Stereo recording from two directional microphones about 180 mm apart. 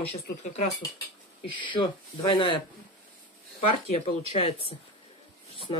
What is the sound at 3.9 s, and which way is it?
Speech, 30° left (ahead or behind).